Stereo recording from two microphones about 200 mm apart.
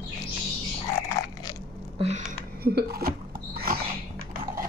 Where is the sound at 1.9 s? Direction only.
30° right (ahead or behind).